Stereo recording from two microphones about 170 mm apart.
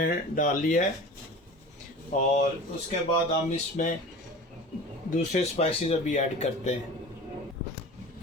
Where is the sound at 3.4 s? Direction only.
45° left (ahead or behind).